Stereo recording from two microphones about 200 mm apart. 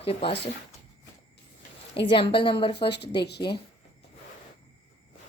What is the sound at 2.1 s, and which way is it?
Speech, 25° left (ahead or behind).